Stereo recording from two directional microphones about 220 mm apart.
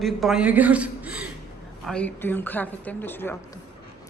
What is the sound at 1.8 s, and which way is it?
A woman's voice, 5° left (ahead or behind).